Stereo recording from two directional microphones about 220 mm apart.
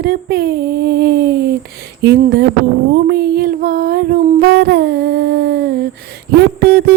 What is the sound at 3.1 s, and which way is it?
Child singing, 45° right (ahead or behind).